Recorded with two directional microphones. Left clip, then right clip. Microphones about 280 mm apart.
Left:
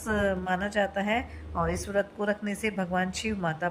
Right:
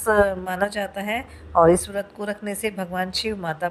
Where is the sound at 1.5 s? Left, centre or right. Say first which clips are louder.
Right 15 dB; right.